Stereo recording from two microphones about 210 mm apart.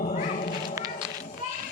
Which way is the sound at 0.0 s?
35° left (ahead or behind).